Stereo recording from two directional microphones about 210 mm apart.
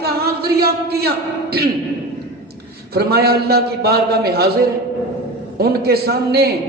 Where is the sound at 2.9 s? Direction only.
50° right (ahead or behind).